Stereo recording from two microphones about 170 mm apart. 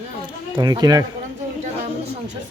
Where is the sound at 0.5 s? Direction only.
25° right (ahead or behind).